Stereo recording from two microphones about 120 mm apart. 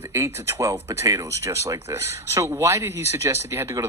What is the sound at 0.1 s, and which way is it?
Speech, 25° right (ahead or behind).